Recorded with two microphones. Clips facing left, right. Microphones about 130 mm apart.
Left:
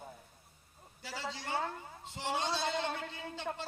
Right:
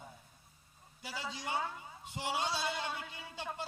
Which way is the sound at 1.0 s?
15° right (ahead or behind).